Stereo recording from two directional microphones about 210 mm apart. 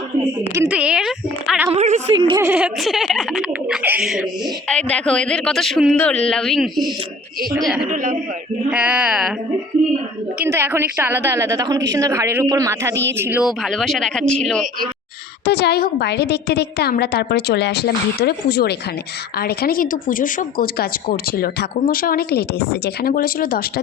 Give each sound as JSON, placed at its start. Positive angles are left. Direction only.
{"t": 0.5, "sound": "a woman's voice", "side_deg": -10}
{"t": 1.7, "sound": "a man's voice", "side_deg": -35}
{"t": 2.1, "sound": "a woman's voice", "side_deg": -20}
{"t": 2.5, "sound": "speech", "side_deg": -5}
{"t": 7.9, "sound": "a man's voice", "side_deg": -40}
{"t": 8.7, "sound": "speech", "side_deg": -5}
{"t": 10.4, "sound": "a woman's voice", "side_deg": -10}
{"t": 15.4, "sound": "speech", "side_deg": 50}